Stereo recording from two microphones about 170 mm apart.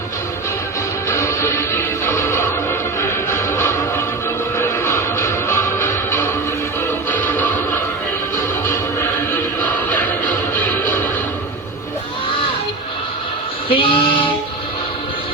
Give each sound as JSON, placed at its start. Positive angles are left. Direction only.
{"t": 1.0, "sound": "music", "side_deg": 15}
{"t": 9.6, "sound": "music", "side_deg": 10}
{"t": 13.7, "sound": "a sound", "side_deg": 30}